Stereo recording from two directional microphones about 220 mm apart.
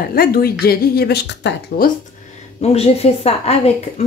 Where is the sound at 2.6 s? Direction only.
30° left (ahead or behind).